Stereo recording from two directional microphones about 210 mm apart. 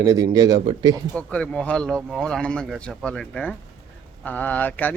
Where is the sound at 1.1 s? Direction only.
5° left (ahead or behind).